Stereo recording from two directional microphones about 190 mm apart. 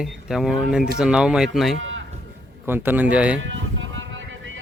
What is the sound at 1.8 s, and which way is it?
Livestock, 90° right.